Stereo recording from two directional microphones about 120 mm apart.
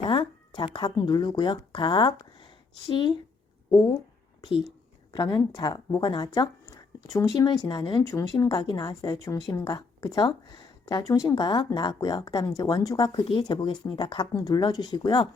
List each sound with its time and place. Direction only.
0.0 s speech: 45° left (ahead or behind)
5.1 s a woman's voice: 30° left (ahead or behind)